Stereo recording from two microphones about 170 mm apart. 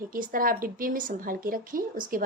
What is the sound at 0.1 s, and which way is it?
A woman's voice, 55° right (ahead or behind).